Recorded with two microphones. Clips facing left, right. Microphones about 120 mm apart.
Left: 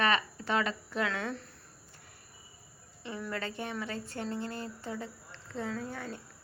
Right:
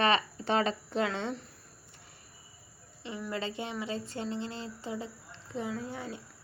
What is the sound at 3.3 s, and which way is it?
Speech, 20° right (ahead or behind).